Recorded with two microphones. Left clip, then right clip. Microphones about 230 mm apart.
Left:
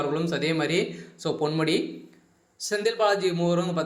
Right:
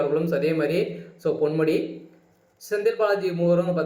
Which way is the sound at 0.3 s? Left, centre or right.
Left.